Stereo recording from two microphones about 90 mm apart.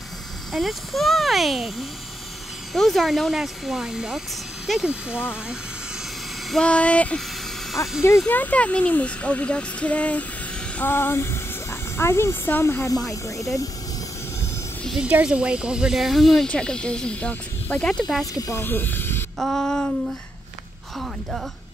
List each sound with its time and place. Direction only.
0.5 s speech: centre (ahead or behind)
6.5 s speech: 10° left (ahead or behind)
7.8 s speech: 35° left (ahead or behind)
8.3 s speech: 20° left (ahead or behind)
10.8 s speech: 25° left (ahead or behind)
15.0 s speech: 10° right (ahead or behind); by 18.0 s 10° left (ahead or behind)
18.2 s speech: 40° left (ahead or behind)
18.6 s speech: 25° left (ahead or behind)
19.3 s speech: centre (ahead or behind)
21.0 s speech: centre (ahead or behind)